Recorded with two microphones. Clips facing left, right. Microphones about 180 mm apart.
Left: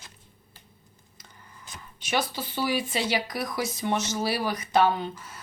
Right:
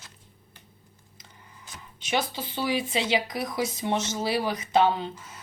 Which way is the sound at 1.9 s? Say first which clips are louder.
Even; 25° right (ahead or behind).